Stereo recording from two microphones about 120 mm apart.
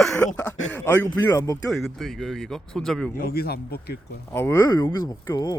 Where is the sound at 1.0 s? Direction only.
30° left (ahead or behind).